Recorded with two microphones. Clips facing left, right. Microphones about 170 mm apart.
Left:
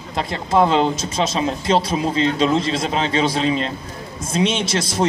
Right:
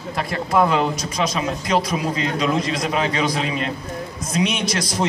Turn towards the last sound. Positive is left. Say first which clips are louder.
# left 2 dB
turn(degrees=25)  # may be behind; listen again after turning